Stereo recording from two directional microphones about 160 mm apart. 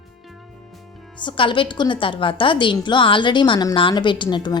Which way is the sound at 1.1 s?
30° left (ahead or behind).